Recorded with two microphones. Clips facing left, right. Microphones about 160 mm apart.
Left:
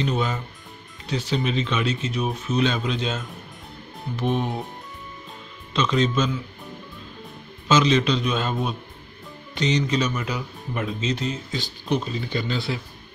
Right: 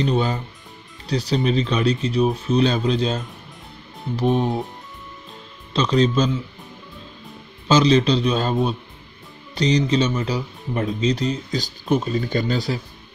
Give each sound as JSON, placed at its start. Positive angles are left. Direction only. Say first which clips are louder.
{"t": 0.0, "sound": "speech", "louder": "right 4 dB", "side_deg": -35}
{"t": 5.7, "sound": "speech", "louder": "right 4 dB", "side_deg": -35}
{"t": 7.6, "sound": "speech", "louder": "right 3 dB", "side_deg": -35}